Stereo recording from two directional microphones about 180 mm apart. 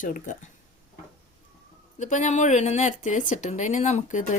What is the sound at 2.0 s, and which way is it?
Speech, 45° left (ahead or behind).